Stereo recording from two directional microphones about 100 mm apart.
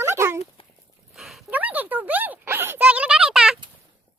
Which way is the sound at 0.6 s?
65° left (ahead or behind).